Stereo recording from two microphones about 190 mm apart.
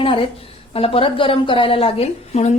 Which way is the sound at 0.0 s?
25° left (ahead or behind).